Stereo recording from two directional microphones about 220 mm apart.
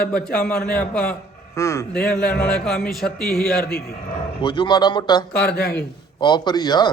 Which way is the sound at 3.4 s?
45° left (ahead or behind).